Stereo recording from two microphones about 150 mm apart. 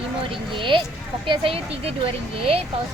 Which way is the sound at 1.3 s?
40° right (ahead or behind).